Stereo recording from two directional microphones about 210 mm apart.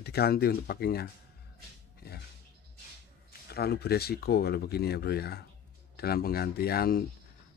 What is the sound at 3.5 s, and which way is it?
Speech, 50° left (ahead or behind).